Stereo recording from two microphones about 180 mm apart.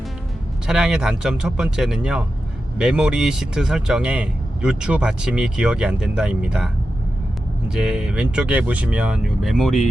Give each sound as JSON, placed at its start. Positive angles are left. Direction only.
{"t": 0.7, "sound": "speech", "side_deg": -5}
{"t": 7.7, "sound": "speech", "side_deg": -5}